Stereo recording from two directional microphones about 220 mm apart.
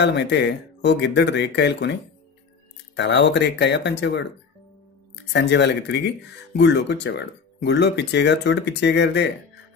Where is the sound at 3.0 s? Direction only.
55° left (ahead or behind).